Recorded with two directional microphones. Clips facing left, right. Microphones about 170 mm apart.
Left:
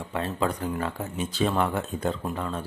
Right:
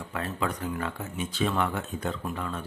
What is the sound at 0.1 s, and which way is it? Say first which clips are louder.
Speech: left 4 dB; 30° left (ahead or behind).